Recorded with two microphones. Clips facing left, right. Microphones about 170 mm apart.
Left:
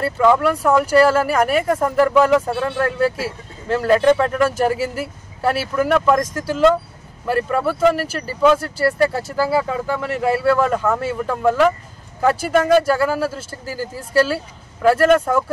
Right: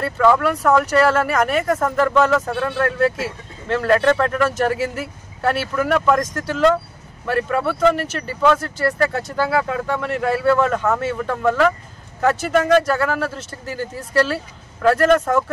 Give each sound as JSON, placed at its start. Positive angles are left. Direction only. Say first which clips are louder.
{"t": 0.0, "sound": "speech", "louder": "left 1 dB", "side_deg": 15}